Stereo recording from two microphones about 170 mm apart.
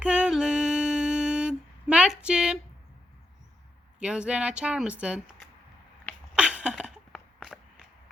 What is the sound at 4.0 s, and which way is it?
Speech, 5° right (ahead or behind).